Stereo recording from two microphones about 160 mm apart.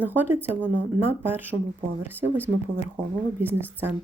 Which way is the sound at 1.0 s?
15° right (ahead or behind).